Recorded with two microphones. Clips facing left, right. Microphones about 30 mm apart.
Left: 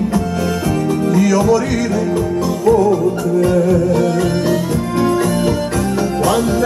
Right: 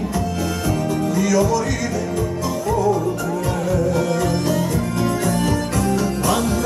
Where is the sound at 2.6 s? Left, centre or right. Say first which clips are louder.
Left 7 dB; centre.